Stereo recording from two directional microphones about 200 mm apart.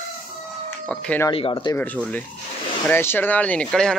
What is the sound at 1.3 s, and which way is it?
Speech, 25° left (ahead or behind).